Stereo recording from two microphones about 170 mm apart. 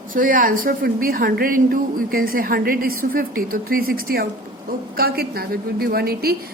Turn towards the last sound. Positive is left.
turn(degrees=-65)  # may be behind; listen again after turning